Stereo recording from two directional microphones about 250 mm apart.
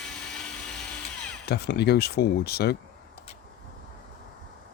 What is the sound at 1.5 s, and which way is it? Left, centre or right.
Speech, left.